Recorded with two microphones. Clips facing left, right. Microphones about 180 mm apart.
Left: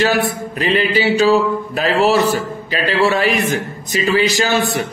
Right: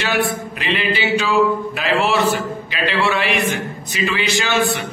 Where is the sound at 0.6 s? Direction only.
40° left (ahead or behind).